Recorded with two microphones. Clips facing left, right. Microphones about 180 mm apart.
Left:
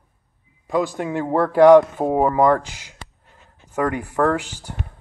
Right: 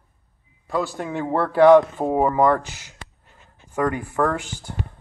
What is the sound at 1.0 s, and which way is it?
Speech, 10° left (ahead or behind).